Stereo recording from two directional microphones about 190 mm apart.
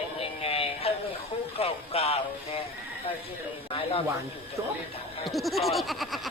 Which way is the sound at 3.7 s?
30° left (ahead or behind).